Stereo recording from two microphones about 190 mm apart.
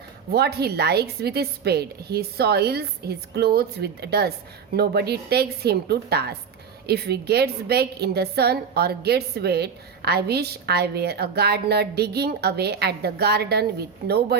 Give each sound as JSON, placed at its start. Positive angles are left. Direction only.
{"t": 0.3, "sound": "a woman's voice", "side_deg": -55}